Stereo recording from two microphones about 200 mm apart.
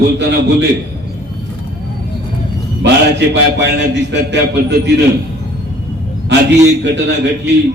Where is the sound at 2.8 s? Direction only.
60° right (ahead or behind).